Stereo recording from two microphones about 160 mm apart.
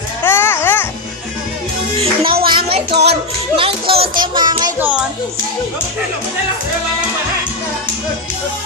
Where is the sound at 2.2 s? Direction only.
70° right (ahead or behind).